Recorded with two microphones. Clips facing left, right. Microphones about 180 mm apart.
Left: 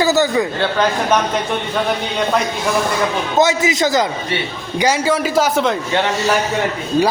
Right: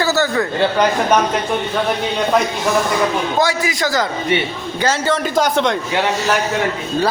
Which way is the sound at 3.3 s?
20° left (ahead or behind).